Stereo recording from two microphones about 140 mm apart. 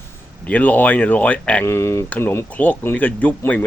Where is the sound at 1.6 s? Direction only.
20° left (ahead or behind).